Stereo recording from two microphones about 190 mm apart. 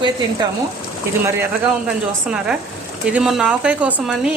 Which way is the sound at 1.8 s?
5° right (ahead or behind).